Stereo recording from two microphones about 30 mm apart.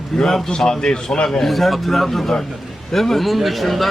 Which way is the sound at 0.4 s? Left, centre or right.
Left.